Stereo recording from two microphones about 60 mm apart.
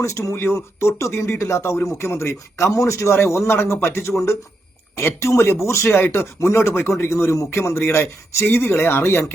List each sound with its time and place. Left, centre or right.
0.0 s a man's voice: left